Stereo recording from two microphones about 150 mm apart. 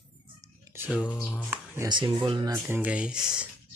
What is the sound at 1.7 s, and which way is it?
Speech, 30° right (ahead or behind).